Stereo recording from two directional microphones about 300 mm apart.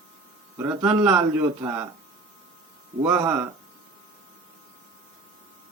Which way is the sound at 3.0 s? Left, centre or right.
Centre.